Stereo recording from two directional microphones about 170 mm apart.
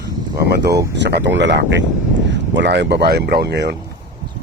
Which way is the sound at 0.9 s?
90° right.